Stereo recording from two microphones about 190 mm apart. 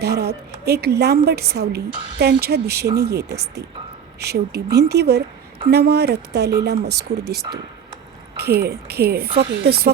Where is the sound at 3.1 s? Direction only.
60° right (ahead or behind).